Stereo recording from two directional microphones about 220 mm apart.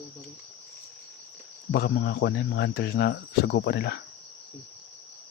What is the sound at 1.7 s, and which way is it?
Speech, 45° left (ahead or behind).